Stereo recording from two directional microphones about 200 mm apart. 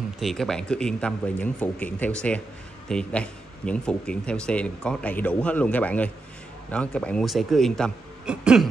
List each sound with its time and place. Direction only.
0.2 s speech: centre (ahead or behind)